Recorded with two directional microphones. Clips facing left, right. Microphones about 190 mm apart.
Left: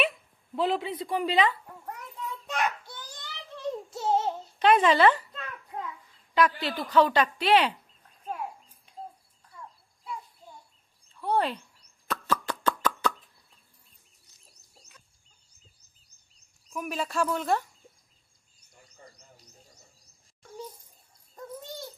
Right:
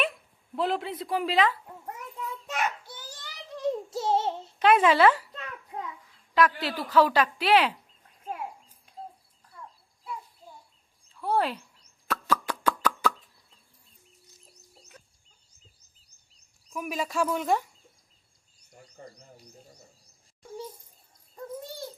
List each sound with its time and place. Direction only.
0.0 s speech: centre (ahead or behind)
2.5 s a sound: 5° right (ahead or behind)
3.9 s child singing: 30° right (ahead or behind)
4.6 s a woman's voice: 5° right (ahead or behind)
6.3 s a woman's voice: centre (ahead or behind)
11.2 s a woman's voice: 5° right (ahead or behind)
12.0 s a sound: 5° right (ahead or behind)
16.6 s speech: 10° right (ahead or behind)